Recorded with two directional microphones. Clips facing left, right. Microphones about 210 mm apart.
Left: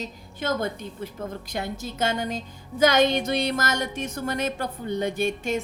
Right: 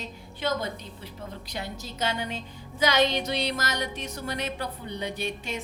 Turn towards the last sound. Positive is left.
turn(degrees=50)  # may be behind; listen again after turning